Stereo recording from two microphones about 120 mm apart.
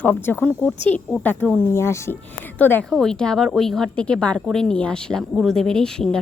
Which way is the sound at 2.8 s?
5° left (ahead or behind).